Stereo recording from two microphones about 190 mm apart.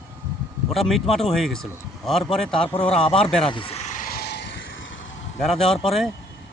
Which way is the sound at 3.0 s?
30° left (ahead or behind).